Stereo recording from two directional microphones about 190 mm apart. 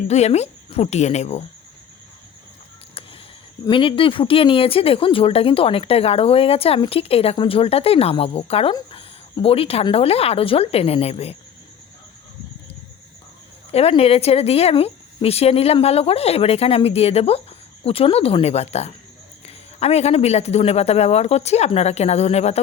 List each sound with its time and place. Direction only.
0.1 s speech: 35° left (ahead or behind)
3.7 s speech: 25° left (ahead or behind)
13.7 s speech: 30° left (ahead or behind)